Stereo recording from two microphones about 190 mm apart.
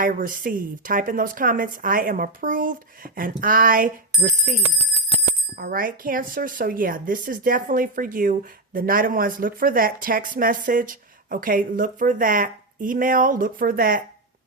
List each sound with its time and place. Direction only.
0.0 s speech: 45° right (ahead or behind)
5.5 s speech: 50° right (ahead or behind)